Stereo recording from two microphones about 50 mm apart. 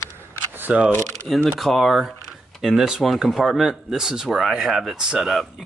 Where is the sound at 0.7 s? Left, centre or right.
Right.